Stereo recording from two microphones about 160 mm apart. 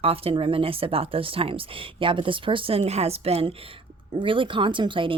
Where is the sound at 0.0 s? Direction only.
35° right (ahead or behind).